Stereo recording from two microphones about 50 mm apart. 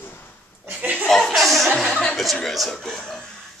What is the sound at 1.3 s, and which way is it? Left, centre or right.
Speech, centre.